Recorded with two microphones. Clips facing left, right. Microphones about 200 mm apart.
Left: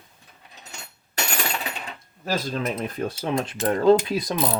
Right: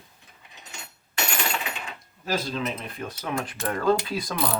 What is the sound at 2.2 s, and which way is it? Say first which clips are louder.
Speech: left 2 dB; 50° left (ahead or behind).